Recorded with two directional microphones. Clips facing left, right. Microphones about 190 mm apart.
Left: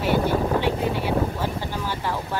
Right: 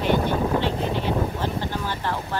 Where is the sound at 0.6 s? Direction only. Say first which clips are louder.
Left 1 dB; 10° left (ahead or behind).